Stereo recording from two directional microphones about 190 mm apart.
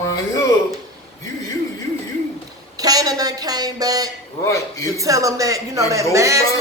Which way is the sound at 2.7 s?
20° right (ahead or behind).